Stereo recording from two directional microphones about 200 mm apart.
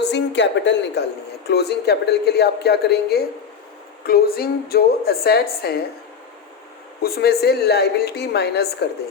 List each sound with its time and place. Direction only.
0.0 s a woman's voice: 60° left (ahead or behind)
7.0 s a woman's voice: 50° left (ahead or behind)